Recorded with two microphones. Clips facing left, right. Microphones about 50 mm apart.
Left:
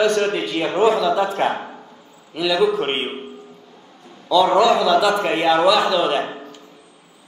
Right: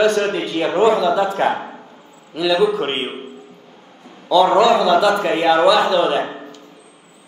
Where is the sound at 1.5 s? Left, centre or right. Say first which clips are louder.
Right 3 dB; centre.